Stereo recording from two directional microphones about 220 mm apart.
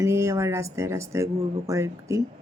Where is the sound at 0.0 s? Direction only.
10° right (ahead or behind).